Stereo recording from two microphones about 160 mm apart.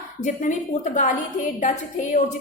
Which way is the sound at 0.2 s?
50° left (ahead or behind).